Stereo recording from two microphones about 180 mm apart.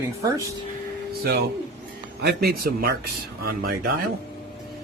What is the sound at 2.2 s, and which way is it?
Speech, 55° right (ahead or behind).